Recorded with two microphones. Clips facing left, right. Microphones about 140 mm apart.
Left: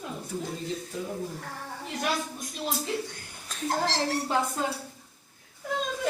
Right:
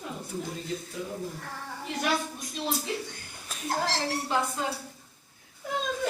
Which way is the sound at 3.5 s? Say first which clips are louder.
Left 6 dB; 5° right (ahead or behind).